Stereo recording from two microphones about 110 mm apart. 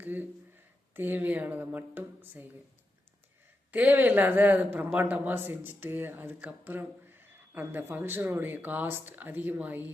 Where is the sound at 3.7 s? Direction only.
15° right (ahead or behind).